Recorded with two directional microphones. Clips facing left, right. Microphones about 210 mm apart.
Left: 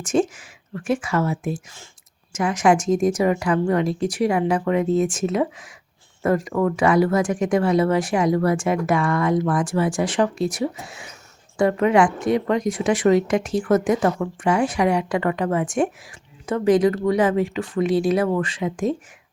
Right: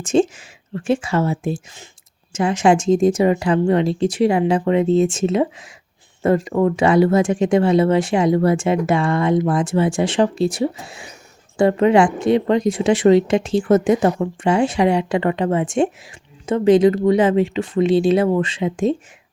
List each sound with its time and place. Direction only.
0.0 s speech: 25° right (ahead or behind)